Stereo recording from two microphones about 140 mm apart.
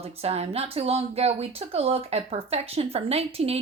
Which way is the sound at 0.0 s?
45° right (ahead or behind).